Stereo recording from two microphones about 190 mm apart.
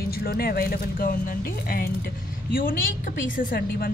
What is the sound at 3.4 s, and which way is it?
Speech, 50° left (ahead or behind).